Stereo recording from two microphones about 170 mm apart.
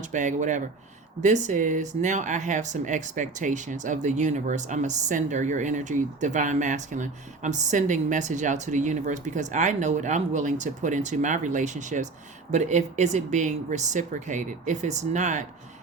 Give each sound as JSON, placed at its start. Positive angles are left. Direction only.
{"t": 0.0, "sound": "speech", "side_deg": -45}